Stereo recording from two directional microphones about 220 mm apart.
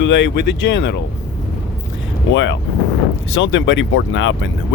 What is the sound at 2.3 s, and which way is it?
Speech, 55° left (ahead or behind).